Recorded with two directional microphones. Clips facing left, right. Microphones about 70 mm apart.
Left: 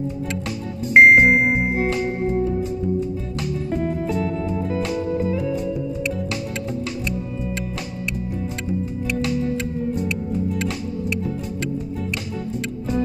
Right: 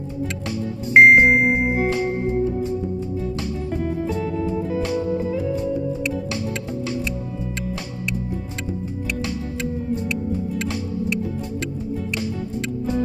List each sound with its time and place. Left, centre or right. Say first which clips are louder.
0.9 s music: even; centre
3.7 s music: left 1 dB; left